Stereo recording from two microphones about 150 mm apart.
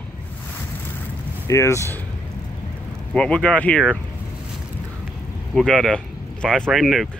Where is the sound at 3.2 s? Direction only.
5° left (ahead or behind).